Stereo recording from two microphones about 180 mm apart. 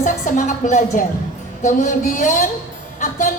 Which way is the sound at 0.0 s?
45° left (ahead or behind).